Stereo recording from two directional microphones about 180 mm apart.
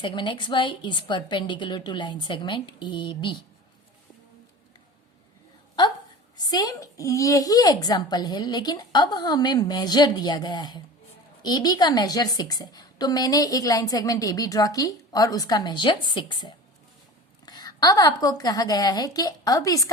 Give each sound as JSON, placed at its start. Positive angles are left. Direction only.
{"t": 0.0, "sound": "a woman's voice", "side_deg": 25}
{"t": 6.3, "sound": "a woman's voice", "side_deg": 20}